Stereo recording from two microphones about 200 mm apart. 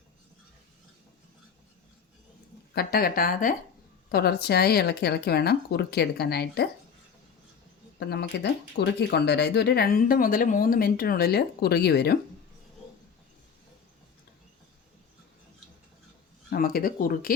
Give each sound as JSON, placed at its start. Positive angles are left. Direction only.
{"t": 2.7, "sound": "speech", "side_deg": 50}
{"t": 7.9, "sound": "speech", "side_deg": 55}
{"t": 16.5, "sound": "speech", "side_deg": 50}